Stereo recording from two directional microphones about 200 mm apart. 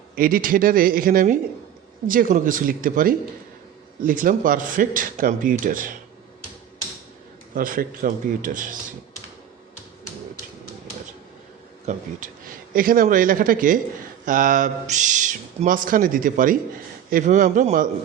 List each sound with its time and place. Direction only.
0.2 s a man's voice: 45° right (ahead or behind)
7.5 s a man's voice: 45° right (ahead or behind)
11.9 s a man's voice: 35° right (ahead or behind)